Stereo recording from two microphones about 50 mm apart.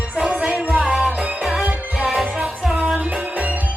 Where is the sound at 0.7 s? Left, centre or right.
Right.